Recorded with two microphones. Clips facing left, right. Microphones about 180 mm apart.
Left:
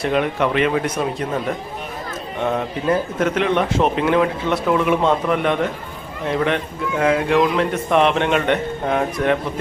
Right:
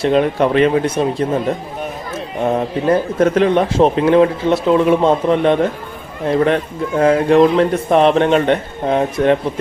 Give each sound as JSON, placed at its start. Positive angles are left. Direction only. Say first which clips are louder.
{"t": 0.0, "sound": "a man's voice", "louder": "right 5 dB", "side_deg": -30}